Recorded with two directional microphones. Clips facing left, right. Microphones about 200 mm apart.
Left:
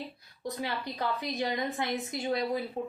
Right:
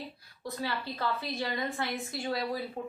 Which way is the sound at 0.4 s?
15° left (ahead or behind).